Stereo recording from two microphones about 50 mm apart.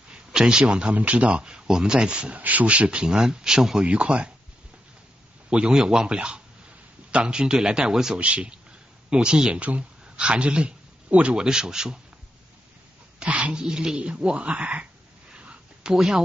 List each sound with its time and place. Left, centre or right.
0.1 s a man's voice: centre
2.3 s speech: right
3.1 s speech: centre
3.9 s speech: right
5.5 s speech: centre
8.2 s speech: right
11.3 s speech: centre
13.5 s speech: centre
15.3 s a sound: centre